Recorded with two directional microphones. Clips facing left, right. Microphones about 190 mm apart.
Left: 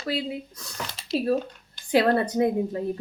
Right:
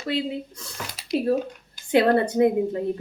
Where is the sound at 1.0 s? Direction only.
10° right (ahead or behind).